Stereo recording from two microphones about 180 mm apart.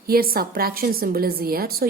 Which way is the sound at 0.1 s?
55° right (ahead or behind).